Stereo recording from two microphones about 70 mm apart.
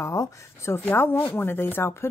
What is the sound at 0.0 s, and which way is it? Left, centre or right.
Speech, left.